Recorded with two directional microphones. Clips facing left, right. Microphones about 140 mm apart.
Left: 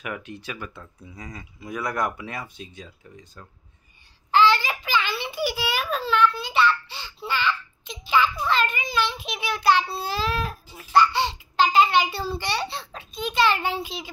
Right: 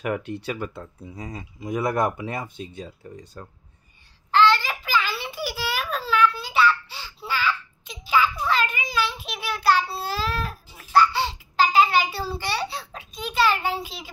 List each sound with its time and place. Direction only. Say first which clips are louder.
0.0 s speech: right 7 dB; 35° right (ahead or behind)
3.0 s speech: right 6 dB; 40° right (ahead or behind)
4.3 s babbling: even; 5° left (ahead or behind)
13.8 s speech: left 4 dB; 5° right (ahead or behind)